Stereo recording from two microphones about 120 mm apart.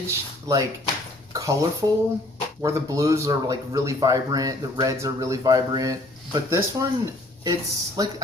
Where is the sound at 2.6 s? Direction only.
25° right (ahead or behind).